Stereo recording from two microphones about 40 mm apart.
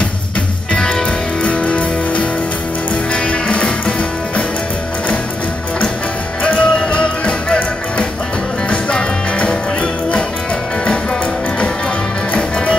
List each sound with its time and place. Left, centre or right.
0.7 s music: centre
1.4 s music: left
3.3 s music: left
6.4 s music: left
12.4 s music: left